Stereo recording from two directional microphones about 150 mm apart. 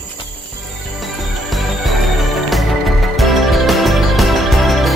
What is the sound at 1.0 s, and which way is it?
Music, centre (ahead or behind).